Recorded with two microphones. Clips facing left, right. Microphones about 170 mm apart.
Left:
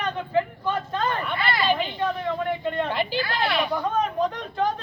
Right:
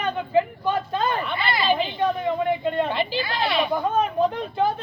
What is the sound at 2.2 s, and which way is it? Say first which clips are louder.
Speech: right 3 dB; 15° right (ahead or behind).